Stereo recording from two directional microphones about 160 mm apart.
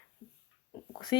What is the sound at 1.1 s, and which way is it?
Speech, 25° left (ahead or behind).